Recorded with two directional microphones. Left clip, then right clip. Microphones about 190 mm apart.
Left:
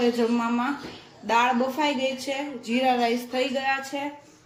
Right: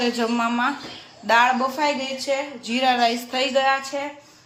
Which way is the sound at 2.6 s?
Centre (ahead or behind).